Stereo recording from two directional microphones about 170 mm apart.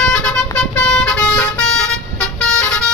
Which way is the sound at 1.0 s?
5° left (ahead or behind).